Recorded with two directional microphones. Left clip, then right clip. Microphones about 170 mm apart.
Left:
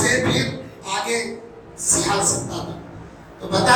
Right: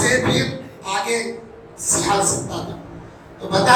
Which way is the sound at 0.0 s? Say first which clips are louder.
Right 1 dB; 35° right (ahead or behind).